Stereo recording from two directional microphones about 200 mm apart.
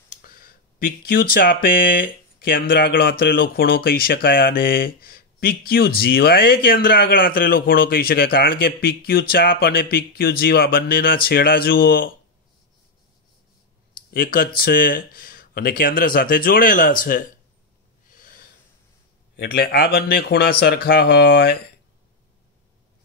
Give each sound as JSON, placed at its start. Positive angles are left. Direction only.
{"t": 0.1, "sound": "speech", "side_deg": 45}
{"t": 14.1, "sound": "speech", "side_deg": 45}
{"t": 19.3, "sound": "speech", "side_deg": 50}